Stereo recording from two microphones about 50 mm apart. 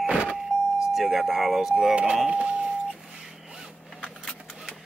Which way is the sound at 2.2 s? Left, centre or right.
Centre.